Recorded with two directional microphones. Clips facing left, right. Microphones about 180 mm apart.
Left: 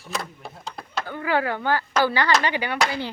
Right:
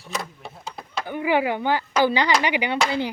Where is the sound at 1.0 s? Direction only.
15° right (ahead or behind).